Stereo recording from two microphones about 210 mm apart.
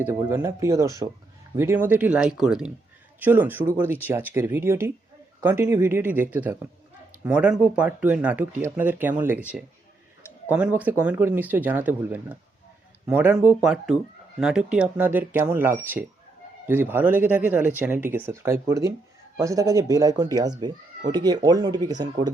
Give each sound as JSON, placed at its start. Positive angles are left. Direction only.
{"t": 0.0, "sound": "speech", "side_deg": -10}